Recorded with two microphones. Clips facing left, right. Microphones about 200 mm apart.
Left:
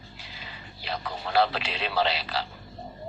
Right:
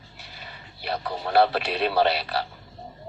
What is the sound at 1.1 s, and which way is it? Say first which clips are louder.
Speech: right 4 dB; 55° right (ahead or behind).